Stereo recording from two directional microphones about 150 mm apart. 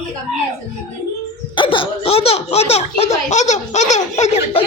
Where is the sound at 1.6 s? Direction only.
35° left (ahead or behind).